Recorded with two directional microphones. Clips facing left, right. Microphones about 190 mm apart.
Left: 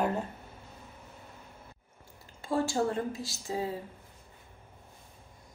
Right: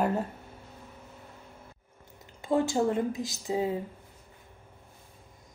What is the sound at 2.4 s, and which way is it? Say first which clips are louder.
Speech: right 3 dB; 20° right (ahead or behind).